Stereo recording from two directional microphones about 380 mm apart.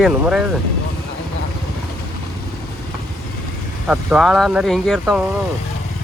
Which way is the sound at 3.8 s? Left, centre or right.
Centre.